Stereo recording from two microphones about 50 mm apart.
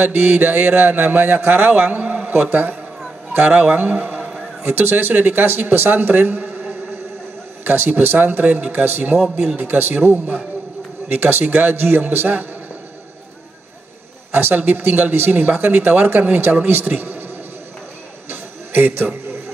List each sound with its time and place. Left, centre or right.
0.0 s speech: right
2.0 s a sound: right
2.4 s speech: right
4.2 s a sound: centre
4.7 s speech: right
7.6 s speech: right
9.2 s a man's voice: centre
9.6 s a man's voice: right
14.3 s speech: right
18.3 s a sound: right